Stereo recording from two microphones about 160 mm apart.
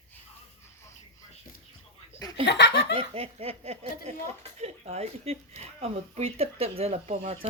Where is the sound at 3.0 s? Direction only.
40° right (ahead or behind).